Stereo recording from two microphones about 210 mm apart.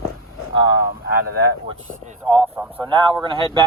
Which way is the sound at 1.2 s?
90° left.